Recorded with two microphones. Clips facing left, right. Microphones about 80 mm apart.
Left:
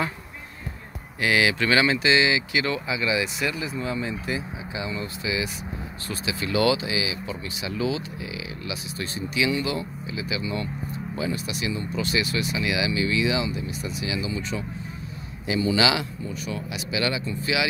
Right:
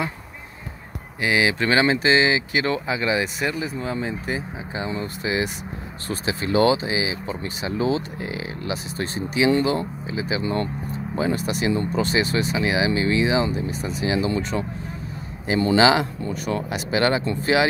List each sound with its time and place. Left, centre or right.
1.2 s speech: right
9.5 s speech: right
10.0 s speech: right
10.4 s speech: right
15.4 s speech: right
16.2 s speech: right